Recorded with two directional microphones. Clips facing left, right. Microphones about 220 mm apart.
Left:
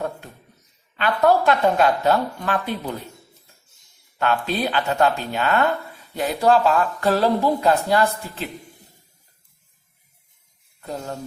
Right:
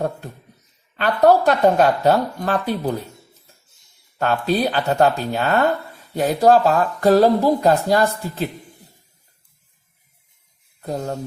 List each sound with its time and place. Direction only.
0.9 s a woman's voice: 40° right (ahead or behind)
4.2 s speech: 40° right (ahead or behind)
10.8 s a woman's voice: 40° right (ahead or behind)